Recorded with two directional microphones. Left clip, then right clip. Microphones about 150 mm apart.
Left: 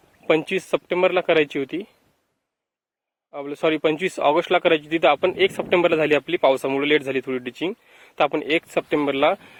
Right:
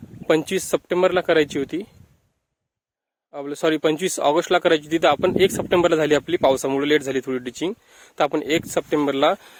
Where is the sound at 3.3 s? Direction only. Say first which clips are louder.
Even; 50° right (ahead or behind).